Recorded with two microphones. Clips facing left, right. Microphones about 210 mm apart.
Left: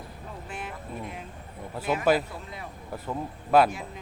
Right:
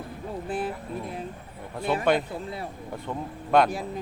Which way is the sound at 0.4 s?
35° right (ahead or behind).